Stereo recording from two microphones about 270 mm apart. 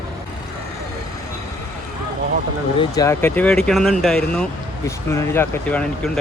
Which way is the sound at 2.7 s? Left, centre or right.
Centre.